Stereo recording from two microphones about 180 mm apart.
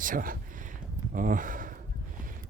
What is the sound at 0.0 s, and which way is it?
A man's voice, 50° right (ahead or behind).